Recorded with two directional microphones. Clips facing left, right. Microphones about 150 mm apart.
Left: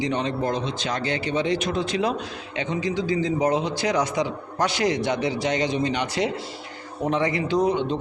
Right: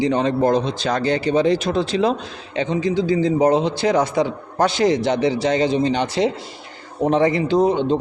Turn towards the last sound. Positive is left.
turn(degrees=-25)  # may be behind; listen again after turning